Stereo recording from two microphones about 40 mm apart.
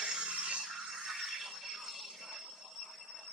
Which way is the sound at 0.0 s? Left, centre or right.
Right.